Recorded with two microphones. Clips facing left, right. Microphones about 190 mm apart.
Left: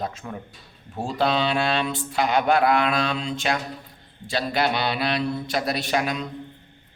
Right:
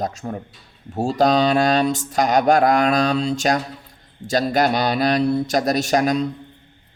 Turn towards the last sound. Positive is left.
turn(degrees=-40)  # may be behind; listen again after turning